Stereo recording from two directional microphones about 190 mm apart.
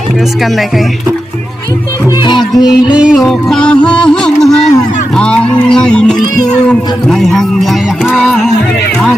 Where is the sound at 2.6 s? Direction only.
20° left (ahead or behind).